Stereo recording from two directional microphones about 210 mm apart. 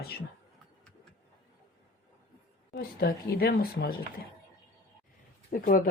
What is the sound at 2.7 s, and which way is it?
Speech, 45° left (ahead or behind).